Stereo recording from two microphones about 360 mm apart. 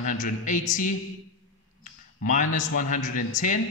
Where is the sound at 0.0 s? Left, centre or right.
Left.